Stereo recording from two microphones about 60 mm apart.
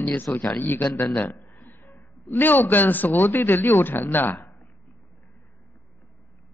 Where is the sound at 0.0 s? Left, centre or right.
Left.